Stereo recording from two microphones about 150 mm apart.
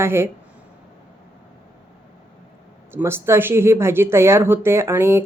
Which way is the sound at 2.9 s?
15° right (ahead or behind).